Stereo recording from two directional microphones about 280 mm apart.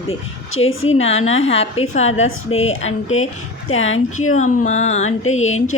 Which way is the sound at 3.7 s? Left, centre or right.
Left.